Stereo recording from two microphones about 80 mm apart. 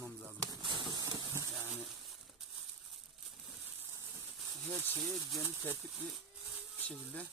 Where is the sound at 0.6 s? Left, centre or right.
Right.